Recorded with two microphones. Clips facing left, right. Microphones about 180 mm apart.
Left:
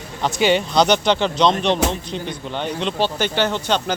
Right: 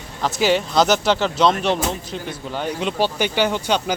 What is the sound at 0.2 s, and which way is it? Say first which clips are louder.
Speech: left 1 dB; centre (ahead or behind).